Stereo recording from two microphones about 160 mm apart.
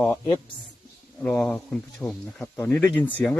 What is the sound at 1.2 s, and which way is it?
Speech, 5° left (ahead or behind).